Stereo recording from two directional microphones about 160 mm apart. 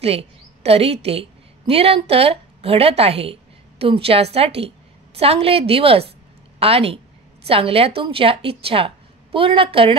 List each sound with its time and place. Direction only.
0.0 s a woman's voice: 40° right (ahead or behind)